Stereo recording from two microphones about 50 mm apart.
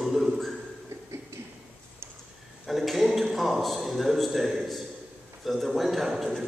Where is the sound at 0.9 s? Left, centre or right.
Right.